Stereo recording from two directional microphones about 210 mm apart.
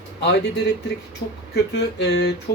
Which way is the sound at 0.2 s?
55° left (ahead or behind).